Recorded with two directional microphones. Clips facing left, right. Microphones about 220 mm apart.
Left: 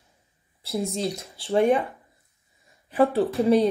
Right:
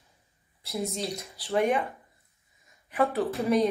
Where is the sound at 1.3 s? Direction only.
30° left (ahead or behind).